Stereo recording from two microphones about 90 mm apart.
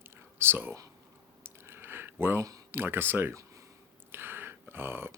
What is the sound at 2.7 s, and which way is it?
Speech, 25° right (ahead or behind).